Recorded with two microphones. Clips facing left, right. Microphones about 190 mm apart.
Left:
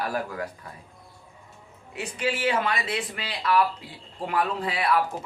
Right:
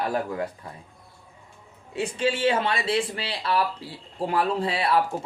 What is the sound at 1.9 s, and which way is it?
Speech, 30° right (ahead or behind).